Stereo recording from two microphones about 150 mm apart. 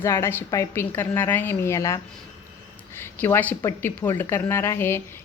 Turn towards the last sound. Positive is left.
turn(degrees=15)  # may be behind; listen again after turning